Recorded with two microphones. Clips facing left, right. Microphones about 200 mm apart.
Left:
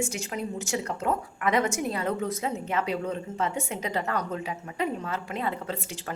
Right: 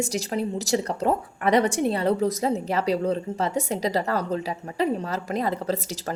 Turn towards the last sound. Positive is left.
turn(degrees=-40)  # may be behind; listen again after turning